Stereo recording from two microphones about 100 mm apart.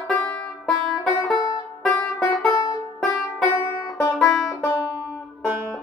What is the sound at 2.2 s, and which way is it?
Music, 10° left (ahead or behind).